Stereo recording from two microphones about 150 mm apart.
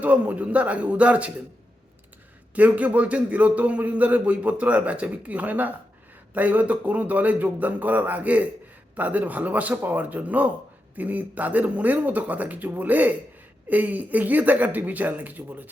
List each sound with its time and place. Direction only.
0.0 s a man's voice: 10° right (ahead or behind)
2.6 s a man's voice: 10° right (ahead or behind)